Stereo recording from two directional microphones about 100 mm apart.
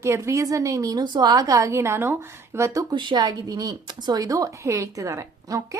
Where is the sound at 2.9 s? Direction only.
50° right (ahead or behind).